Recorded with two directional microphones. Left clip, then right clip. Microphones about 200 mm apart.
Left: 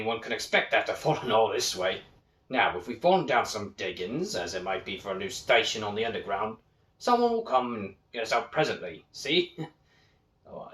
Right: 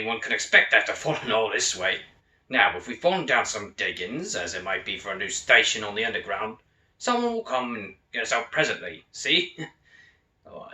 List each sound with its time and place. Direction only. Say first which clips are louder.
0.0 s speech: right 4 dB; 15° left (ahead or behind)